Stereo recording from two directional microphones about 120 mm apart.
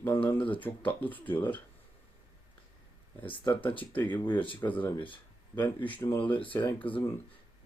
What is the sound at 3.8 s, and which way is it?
Speech, 15° left (ahead or behind).